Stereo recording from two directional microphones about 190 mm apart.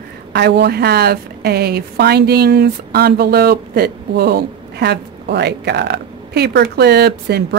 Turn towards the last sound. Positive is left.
turn(degrees=-60)  # may be behind; listen again after turning